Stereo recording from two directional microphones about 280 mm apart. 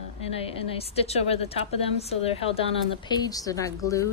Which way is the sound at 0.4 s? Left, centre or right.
Left.